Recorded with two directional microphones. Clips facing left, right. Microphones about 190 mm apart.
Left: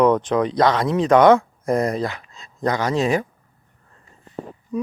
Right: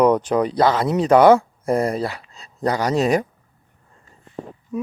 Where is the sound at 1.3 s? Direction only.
35° right (ahead or behind).